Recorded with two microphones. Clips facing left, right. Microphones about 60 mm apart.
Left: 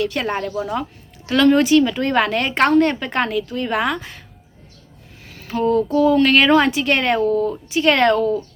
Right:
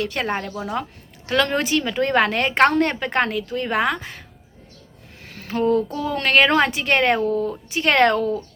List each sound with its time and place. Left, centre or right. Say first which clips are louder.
0.0 s a woman's voice: left 3 dB; right
0.3 s speech: left 2 dB; centre
1.3 s a woman's voice: left 7 dB; right
5.2 s a sound: left 1 dB; right
5.9 s a woman's voice: left 6 dB; right